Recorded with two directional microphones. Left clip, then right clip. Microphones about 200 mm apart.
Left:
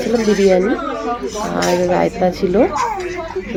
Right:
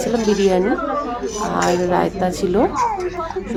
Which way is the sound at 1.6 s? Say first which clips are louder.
Left 3 dB; 10° left (ahead or behind).